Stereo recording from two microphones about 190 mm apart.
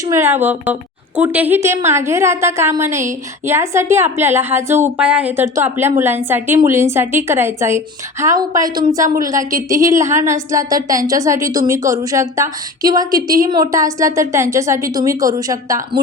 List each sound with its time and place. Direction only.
0.1 s a woman's voice: 10° right (ahead or behind)